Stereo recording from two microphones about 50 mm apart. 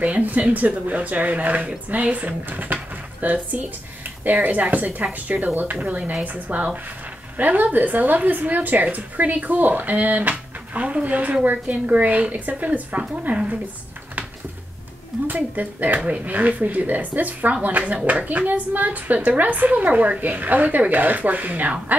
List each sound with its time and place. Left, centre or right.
0.0 s a woman's voice: right
15.2 s speech: right